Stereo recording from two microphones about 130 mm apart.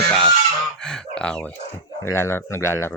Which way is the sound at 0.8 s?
5° left (ahead or behind).